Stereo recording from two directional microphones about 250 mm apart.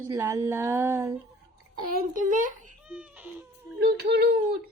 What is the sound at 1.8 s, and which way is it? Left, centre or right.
Speech, right.